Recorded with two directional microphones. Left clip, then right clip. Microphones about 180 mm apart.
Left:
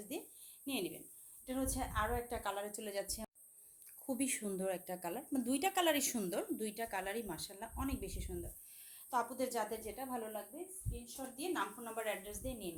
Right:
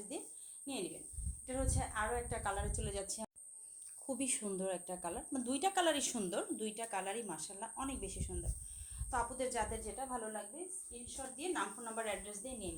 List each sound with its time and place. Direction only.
0.1 s a sound: 30° left (ahead or behind)
1.5 s speech: 35° left (ahead or behind)
11.0 s a woman's voice: 30° left (ahead or behind)